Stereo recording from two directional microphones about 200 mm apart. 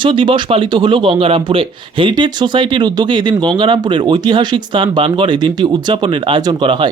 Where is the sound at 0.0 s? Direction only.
25° right (ahead or behind).